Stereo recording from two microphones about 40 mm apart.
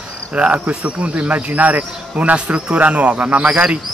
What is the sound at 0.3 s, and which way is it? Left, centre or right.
A man's voice, right.